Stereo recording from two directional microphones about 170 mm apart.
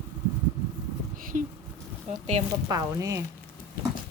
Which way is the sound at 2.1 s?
40° right (ahead or behind).